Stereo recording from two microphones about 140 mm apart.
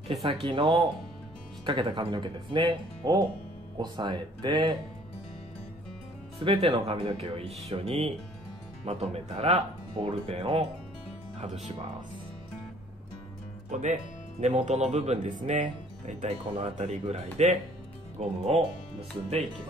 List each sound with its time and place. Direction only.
0.2 s speech: 40° right (ahead or behind)
6.4 s speech: 40° right (ahead or behind); by 11.7 s 55° right (ahead or behind)
13.7 s speech: 60° right (ahead or behind)